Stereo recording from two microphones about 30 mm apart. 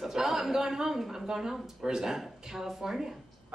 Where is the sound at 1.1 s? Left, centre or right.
Centre.